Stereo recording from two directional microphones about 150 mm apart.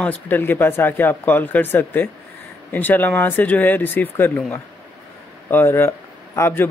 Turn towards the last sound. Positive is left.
turn(degrees=15)  # may be behind; listen again after turning